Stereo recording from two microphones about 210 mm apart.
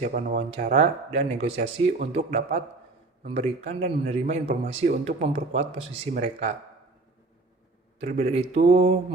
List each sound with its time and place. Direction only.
0.0 s a man's voice: 35° right (ahead or behind)
8.0 s speech: 35° right (ahead or behind)